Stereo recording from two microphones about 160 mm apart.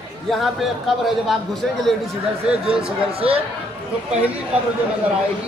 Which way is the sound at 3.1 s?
35° right (ahead or behind).